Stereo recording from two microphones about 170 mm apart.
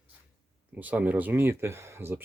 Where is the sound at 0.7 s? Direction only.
10° right (ahead or behind).